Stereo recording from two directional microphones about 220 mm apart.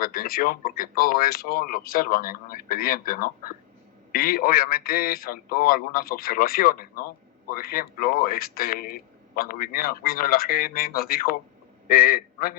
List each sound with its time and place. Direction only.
0.0 s speech: 40° left (ahead or behind)